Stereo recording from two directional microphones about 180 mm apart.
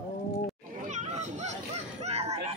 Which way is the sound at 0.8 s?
40° right (ahead or behind).